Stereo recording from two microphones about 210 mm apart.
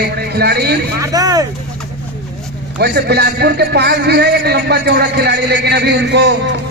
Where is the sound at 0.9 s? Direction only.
15° right (ahead or behind).